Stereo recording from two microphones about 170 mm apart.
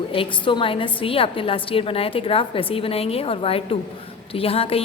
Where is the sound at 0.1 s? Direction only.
30° left (ahead or behind).